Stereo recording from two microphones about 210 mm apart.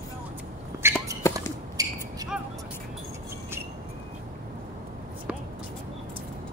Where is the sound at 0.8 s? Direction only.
10° right (ahead or behind).